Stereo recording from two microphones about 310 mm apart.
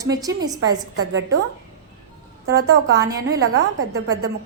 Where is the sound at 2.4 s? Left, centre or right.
Right.